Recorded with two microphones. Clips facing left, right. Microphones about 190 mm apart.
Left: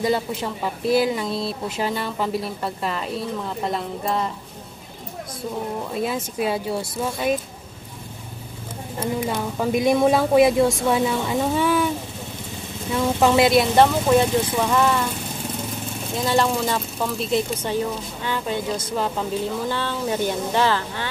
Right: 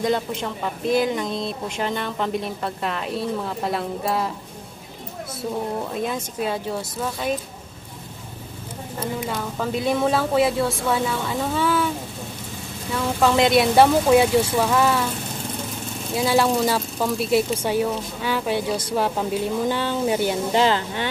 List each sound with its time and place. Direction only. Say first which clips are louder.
0.0 s speech: even; 5° left (ahead or behind)
5.9 s speech: left 1 dB; 5° left (ahead or behind)
9.3 s speech: left 3 dB; 15° left (ahead or behind)
13.2 s speech: left 1 dB; 10° left (ahead or behind)
13.5 s speech: right 1 dB; 5° right (ahead or behind)
16.2 s speech: right 2 dB; 5° right (ahead or behind)